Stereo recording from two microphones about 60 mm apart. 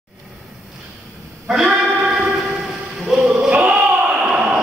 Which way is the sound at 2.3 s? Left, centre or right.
Centre.